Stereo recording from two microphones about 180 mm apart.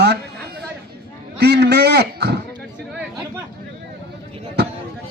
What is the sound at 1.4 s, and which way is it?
Speech, 65° right (ahead or behind).